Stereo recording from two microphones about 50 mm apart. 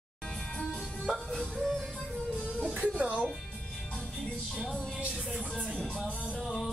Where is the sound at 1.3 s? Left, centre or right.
Centre.